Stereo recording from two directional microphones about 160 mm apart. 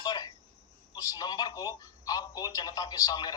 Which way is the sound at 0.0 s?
25° left (ahead or behind).